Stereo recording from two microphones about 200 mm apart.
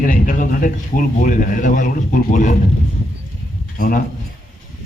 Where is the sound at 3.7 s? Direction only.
45° left (ahead or behind).